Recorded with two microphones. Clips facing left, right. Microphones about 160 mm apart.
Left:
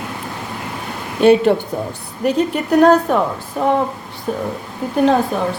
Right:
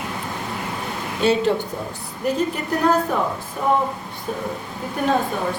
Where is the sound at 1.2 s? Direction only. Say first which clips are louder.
Left 7 dB; 60° left (ahead or behind).